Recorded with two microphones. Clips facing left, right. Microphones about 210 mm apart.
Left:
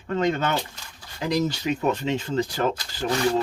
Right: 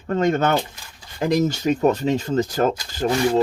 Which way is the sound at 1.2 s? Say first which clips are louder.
Right 5 dB; 50° right (ahead or behind).